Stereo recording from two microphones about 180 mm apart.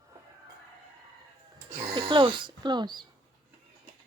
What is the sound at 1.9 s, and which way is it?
Speech, 25° right (ahead or behind).